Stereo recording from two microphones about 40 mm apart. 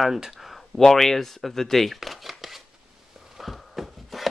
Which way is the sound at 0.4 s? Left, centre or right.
Centre.